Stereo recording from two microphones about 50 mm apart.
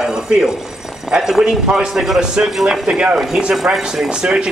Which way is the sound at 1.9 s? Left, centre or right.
Centre.